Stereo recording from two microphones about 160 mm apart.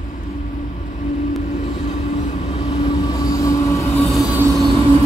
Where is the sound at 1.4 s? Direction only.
55° left (ahead or behind); by 4.0 s 20° left (ahead or behind).